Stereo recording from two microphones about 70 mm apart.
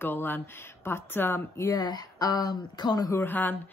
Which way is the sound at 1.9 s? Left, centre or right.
Left.